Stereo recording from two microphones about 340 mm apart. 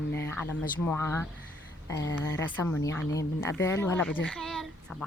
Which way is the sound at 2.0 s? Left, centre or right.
Left.